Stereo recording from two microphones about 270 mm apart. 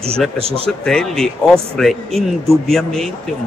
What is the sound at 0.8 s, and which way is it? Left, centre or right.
Speech, centre.